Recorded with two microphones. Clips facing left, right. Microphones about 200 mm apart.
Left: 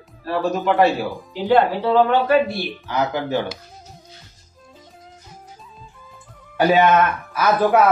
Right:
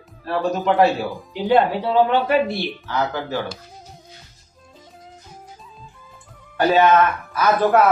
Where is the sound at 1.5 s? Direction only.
15° right (ahead or behind).